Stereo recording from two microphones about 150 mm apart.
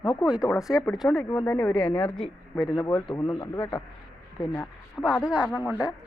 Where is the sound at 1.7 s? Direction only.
35° left (ahead or behind).